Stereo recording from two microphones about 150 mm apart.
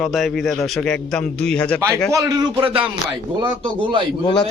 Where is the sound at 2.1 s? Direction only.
20° right (ahead or behind).